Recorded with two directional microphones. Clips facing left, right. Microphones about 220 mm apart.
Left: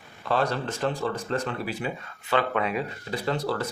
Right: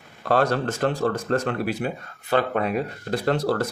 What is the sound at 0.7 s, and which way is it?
Speech, 55° right (ahead or behind).